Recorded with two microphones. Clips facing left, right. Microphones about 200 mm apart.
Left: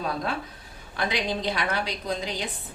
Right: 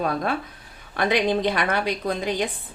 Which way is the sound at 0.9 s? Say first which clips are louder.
Right 7 dB; 55° right (ahead or behind).